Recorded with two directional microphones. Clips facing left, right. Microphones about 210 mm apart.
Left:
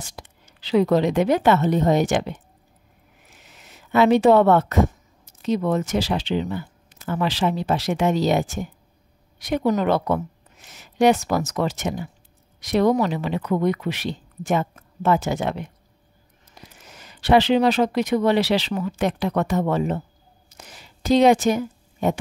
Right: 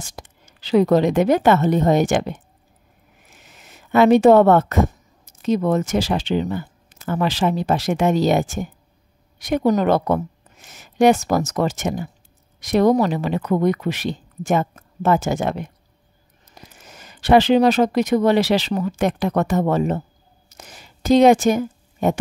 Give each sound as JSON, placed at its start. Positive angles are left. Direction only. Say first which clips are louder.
{"t": 0.0, "sound": "a woman's voice", "louder": "right 2 dB", "side_deg": -45}
{"t": 3.3, "sound": "speech", "louder": "right 2 dB", "side_deg": -50}